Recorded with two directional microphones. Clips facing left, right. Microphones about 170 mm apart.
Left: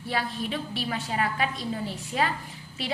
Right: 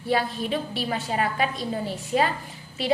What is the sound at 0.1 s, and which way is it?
A woman's voice, 35° right (ahead or behind).